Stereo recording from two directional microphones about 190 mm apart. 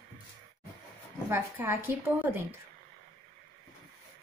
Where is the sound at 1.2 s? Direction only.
10° right (ahead or behind).